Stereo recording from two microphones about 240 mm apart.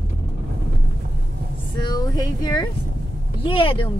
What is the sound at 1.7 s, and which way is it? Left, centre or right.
A woman's voice, centre.